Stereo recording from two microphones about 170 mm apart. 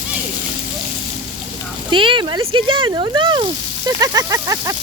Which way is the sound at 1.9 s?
30° right (ahead or behind).